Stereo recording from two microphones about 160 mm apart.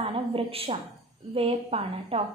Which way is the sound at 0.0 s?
35° right (ahead or behind).